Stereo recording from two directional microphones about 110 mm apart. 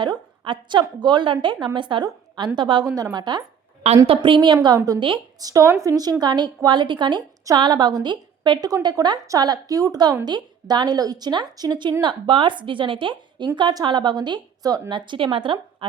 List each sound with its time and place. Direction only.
0.0 s a woman's voice: 50° right (ahead or behind)
2.8 s a woman's voice: 35° right (ahead or behind)
4.0 s a woman's voice: 55° right (ahead or behind)
5.4 s a woman's voice: 35° right (ahead or behind); by 15.9 s 55° right (ahead or behind)